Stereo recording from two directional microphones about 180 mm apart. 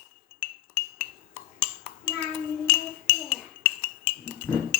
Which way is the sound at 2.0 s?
5° left (ahead or behind).